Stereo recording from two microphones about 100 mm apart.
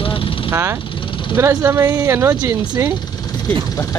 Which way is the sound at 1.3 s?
30° right (ahead or behind).